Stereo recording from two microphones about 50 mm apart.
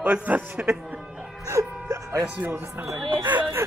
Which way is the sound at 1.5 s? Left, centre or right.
Right.